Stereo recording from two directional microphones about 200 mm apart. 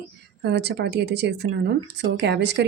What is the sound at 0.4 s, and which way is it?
Speech, 55° right (ahead or behind).